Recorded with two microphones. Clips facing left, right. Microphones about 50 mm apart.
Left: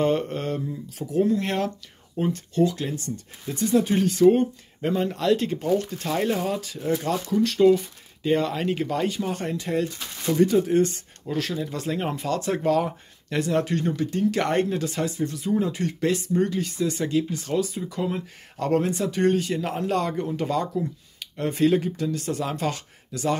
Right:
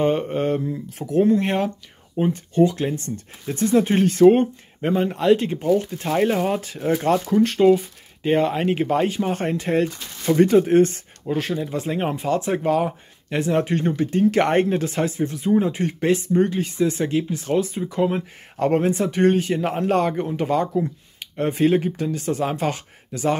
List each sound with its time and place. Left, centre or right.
0.0 s speech: centre
0.5 s speech: right
1.4 s speech: right
4.8 s speech: right
11.2 s speech: right